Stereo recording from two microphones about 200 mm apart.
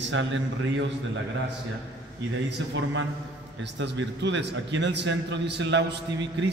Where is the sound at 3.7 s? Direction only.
65° right (ahead or behind).